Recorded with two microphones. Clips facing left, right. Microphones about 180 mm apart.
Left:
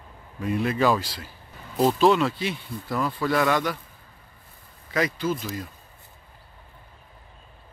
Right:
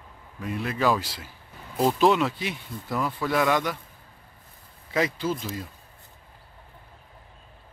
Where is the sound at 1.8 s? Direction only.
10° right (ahead or behind).